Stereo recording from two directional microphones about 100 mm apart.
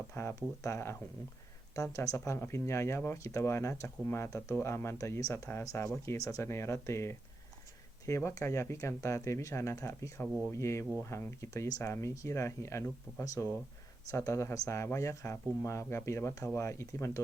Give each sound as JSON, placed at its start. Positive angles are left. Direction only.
{"t": 0.1, "sound": "speech", "side_deg": 25}